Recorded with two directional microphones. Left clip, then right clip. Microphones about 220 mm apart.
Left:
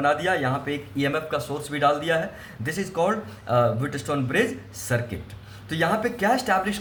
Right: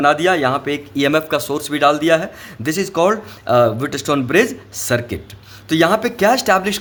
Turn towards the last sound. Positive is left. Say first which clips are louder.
# right 8 dB
turn(degrees=-45)  # may be behind; listen again after turning